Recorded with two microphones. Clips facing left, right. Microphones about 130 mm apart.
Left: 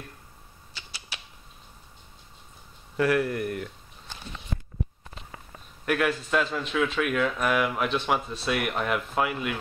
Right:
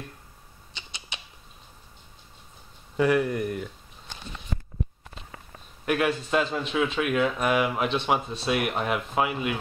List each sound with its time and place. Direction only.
0.7 s rodents: 20° right (ahead or behind)
3.0 s speech: 15° right (ahead or behind)
3.4 s speech: centre (ahead or behind)
5.9 s a man's voice: 20° right (ahead or behind)